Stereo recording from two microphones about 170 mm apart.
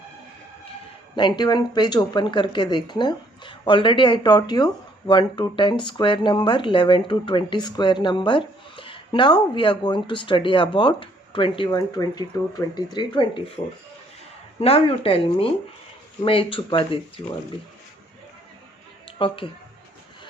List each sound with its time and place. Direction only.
1.1 s speech: 25° left (ahead or behind)
14.6 s speech: 35° left (ahead or behind)
19.0 s a sound: 30° left (ahead or behind)